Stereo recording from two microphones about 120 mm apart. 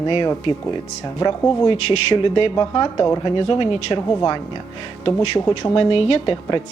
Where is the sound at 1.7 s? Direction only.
50° left (ahead or behind).